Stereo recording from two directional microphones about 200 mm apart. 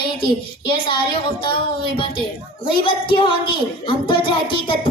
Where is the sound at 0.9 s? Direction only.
25° left (ahead or behind).